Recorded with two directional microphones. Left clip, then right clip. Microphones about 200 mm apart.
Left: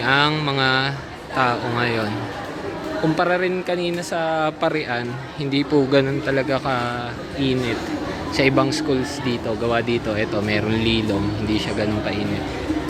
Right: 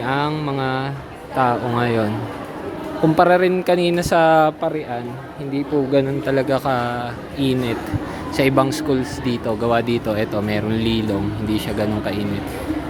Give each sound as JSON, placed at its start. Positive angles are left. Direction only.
{"t": 0.0, "sound": "mantra", "side_deg": -10}
{"t": 1.4, "sound": "speech", "side_deg": -20}
{"t": 3.2, "sound": "speech", "side_deg": -30}
{"t": 4.6, "sound": "mantra", "side_deg": -5}
{"t": 5.5, "sound": "speech", "side_deg": -5}
{"t": 6.2, "sound": "mantra", "side_deg": -20}
{"t": 7.3, "sound": "speech", "side_deg": -20}